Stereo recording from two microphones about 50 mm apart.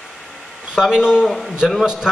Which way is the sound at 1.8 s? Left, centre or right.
Centre.